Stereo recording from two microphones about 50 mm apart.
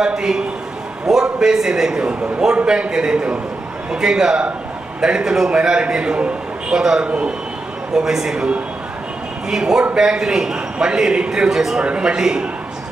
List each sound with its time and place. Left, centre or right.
0.0 s a man's voice: centre
9.5 s a man's voice: centre
11.8 s a man's voice: right